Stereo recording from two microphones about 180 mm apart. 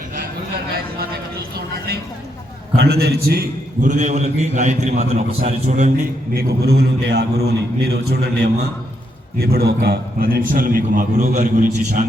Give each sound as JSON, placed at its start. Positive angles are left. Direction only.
{"t": 2.7, "sound": "a man's voice", "side_deg": -60}
{"t": 3.8, "sound": "a man's voice", "side_deg": -40}
{"t": 6.3, "sound": "a man's voice", "side_deg": -60}